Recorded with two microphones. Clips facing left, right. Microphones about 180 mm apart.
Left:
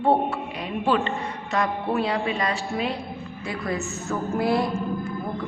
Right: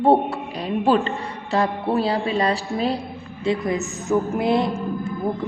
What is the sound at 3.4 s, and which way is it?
A woman's voice, 20° right (ahead or behind).